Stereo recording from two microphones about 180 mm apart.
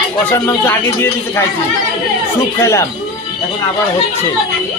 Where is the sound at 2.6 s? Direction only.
15° left (ahead or behind).